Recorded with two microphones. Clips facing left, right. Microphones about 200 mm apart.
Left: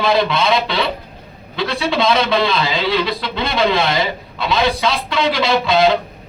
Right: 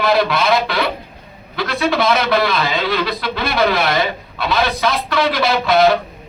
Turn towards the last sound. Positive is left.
turn(degrees=15)  # may be behind; listen again after turning